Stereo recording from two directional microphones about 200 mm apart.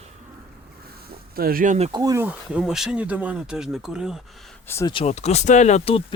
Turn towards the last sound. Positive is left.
turn(degrees=30)  # may be behind; listen again after turning